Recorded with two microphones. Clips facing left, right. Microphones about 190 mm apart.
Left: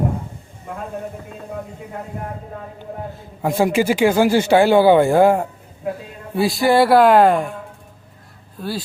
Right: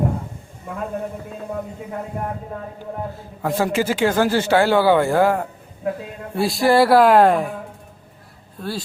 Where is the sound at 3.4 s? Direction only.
15° left (ahead or behind).